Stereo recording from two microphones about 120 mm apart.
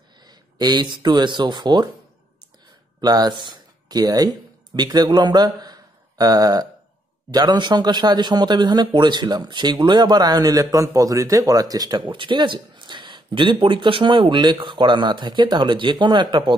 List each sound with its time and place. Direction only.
0.3 s speech: 35° right (ahead or behind)
3.0 s a man's voice: 35° right (ahead or behind)